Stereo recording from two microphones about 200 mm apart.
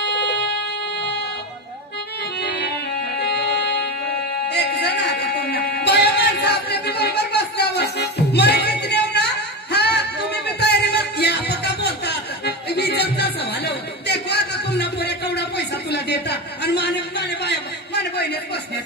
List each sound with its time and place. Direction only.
0.0 s a sound: 55° left (ahead or behind)
3.2 s music: 55° left (ahead or behind)
17.5 s a man's voice: 55° left (ahead or behind)